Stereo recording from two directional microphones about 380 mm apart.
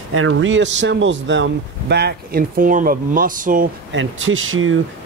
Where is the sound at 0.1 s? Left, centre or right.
Right.